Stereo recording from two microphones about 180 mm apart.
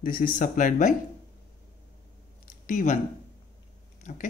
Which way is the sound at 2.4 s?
45° left (ahead or behind).